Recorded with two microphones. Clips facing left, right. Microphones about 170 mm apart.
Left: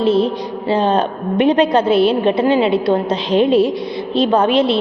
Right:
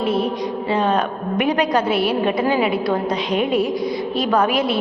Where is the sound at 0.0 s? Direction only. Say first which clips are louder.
Left 5 dB; 25° left (ahead or behind).